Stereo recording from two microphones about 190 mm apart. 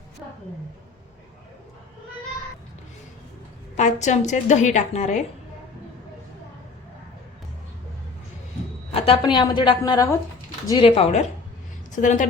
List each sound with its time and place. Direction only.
3.8 s a woman's voice: 40° left (ahead or behind)
8.9 s a woman's voice: 25° left (ahead or behind); by 12.2 s 40° left (ahead or behind)